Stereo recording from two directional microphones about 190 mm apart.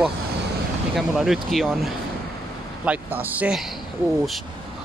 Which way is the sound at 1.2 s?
Centre (ahead or behind).